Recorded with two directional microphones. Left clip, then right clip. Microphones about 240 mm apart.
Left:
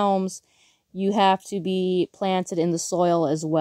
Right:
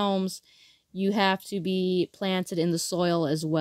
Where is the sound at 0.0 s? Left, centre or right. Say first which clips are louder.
Left 5 dB; centre.